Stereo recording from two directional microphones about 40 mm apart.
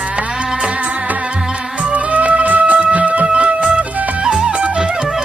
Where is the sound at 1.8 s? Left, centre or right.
Right.